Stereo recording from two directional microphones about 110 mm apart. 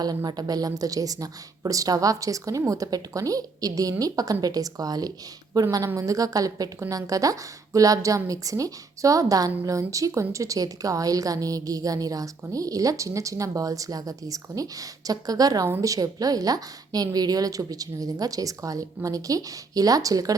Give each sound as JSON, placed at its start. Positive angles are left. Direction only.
{"t": 0.0, "sound": "a woman's voice", "side_deg": -35}